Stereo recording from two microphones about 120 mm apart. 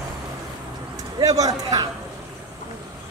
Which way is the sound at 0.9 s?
30° right (ahead or behind).